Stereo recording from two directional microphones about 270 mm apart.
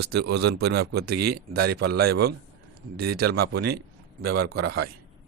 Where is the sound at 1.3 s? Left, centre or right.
Right.